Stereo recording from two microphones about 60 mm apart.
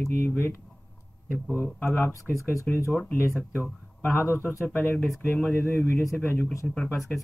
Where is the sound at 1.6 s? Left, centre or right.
Left.